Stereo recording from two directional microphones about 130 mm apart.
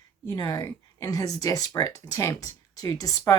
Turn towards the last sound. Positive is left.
turn(degrees=25)  # may be behind; listen again after turning